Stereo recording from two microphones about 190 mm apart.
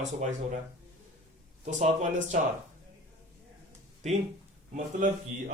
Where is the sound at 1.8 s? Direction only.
40° right (ahead or behind).